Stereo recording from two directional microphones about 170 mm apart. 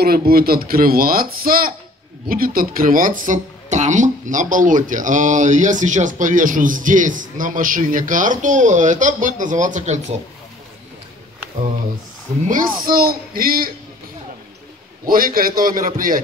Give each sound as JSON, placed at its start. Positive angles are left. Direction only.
{"t": 0.0, "sound": "speech", "side_deg": -65}
{"t": 12.4, "sound": "speech", "side_deg": -55}
{"t": 15.0, "sound": "speech", "side_deg": -55}